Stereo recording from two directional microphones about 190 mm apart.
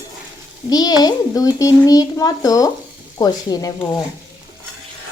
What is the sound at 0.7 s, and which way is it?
A child's voice, 20° left (ahead or behind).